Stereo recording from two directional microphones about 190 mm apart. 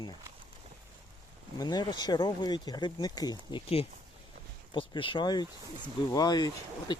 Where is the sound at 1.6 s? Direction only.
20° left (ahead or behind).